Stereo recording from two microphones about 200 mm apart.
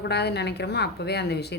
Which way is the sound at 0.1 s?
55° left (ahead or behind).